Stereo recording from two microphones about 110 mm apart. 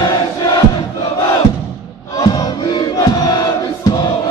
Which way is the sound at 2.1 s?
35° left (ahead or behind).